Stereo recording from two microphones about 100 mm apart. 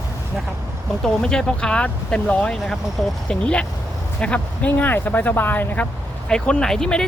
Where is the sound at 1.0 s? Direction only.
5° left (ahead or behind).